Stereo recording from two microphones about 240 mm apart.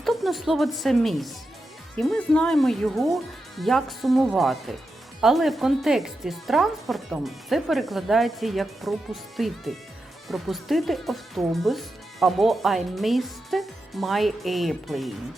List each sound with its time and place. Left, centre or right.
0.0 s speech: centre